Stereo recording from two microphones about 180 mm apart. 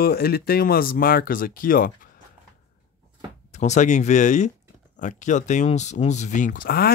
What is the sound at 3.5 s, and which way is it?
Speech, 40° left (ahead or behind).